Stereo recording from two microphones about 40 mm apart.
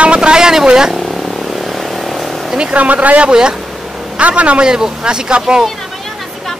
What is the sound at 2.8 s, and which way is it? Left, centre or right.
Speech, right.